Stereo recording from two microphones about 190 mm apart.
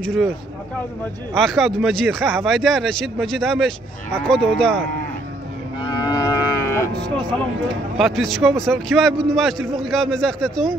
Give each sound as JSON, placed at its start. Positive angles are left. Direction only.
{"t": 0.0, "sound": "speech", "side_deg": 5}
{"t": 1.3, "sound": "speech", "side_deg": 0}
{"t": 5.8, "sound": "moo", "side_deg": 25}
{"t": 8.0, "sound": "speech", "side_deg": 0}